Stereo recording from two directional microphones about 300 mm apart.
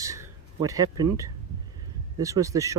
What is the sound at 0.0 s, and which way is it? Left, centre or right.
Speech, centre.